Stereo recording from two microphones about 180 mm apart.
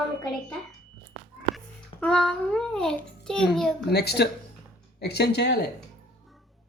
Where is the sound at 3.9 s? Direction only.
65° left (ahead or behind).